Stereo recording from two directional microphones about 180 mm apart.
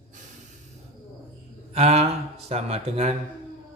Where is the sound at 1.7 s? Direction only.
35° right (ahead or behind).